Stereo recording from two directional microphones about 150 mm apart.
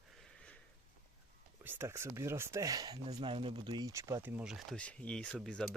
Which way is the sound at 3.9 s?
20° right (ahead or behind).